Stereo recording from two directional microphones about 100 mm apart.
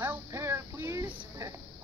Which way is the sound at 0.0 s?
25° right (ahead or behind).